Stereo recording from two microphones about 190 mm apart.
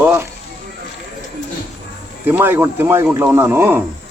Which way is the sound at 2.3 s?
10° right (ahead or behind).